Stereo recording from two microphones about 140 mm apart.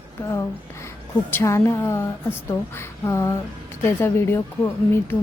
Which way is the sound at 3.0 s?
20° left (ahead or behind).